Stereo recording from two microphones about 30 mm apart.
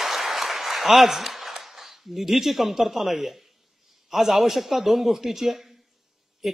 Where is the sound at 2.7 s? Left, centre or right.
Centre.